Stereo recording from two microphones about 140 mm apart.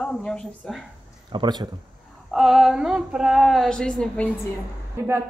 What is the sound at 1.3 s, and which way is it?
Speech, 30° right (ahead or behind).